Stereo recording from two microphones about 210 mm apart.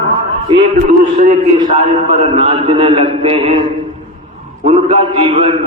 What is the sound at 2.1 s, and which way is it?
A man's voice, 30° right (ahead or behind).